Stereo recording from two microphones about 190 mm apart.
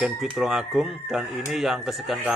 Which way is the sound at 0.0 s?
Centre (ahead or behind).